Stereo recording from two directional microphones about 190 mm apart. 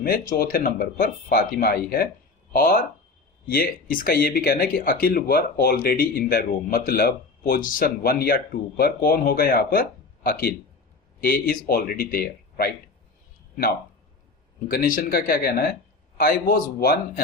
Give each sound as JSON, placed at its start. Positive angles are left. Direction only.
{"t": 0.0, "sound": "speech", "side_deg": 50}
{"t": 14.7, "sound": "speech", "side_deg": 50}